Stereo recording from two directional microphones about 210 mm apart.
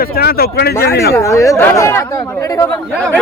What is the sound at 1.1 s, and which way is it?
Speech, 15° left (ahead or behind).